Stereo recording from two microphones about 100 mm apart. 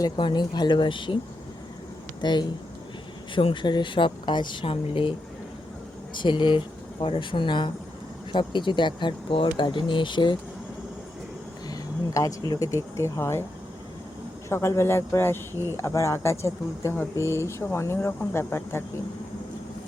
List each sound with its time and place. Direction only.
0.2 s speech: 50° left (ahead or behind)
2.2 s a woman's voice: 45° left (ahead or behind); by 5.1 s 65° left (ahead or behind)
6.1 s a woman's voice: 50° left (ahead or behind)
11.7 s speech: 35° left (ahead or behind)
14.5 s speech: 30° left (ahead or behind)